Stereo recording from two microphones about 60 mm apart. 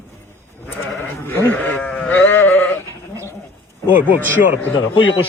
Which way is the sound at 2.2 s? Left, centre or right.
Left.